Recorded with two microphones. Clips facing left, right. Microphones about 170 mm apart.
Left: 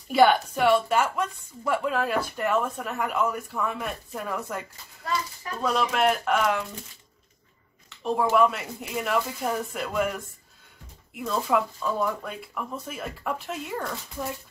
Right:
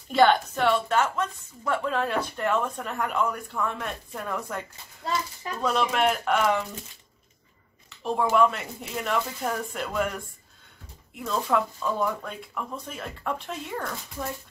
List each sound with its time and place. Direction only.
0.1 s a woman's voice: 5° left (ahead or behind)
5.0 s speech: 25° right (ahead or behind)
5.6 s speech: centre (ahead or behind)
8.0 s speech: 5° left (ahead or behind)